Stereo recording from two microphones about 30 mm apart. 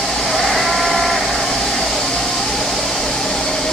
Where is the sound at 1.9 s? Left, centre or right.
Left.